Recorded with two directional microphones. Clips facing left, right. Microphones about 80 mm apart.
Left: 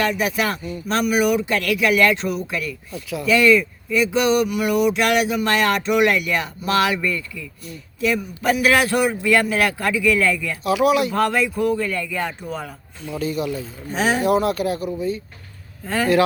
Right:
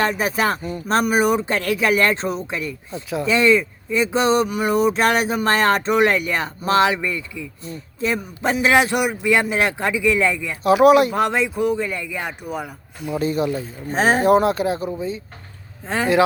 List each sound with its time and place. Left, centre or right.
0.0 s speech: right
10.6 s speech: right
11.1 s a man's voice: right
13.1 s speech: right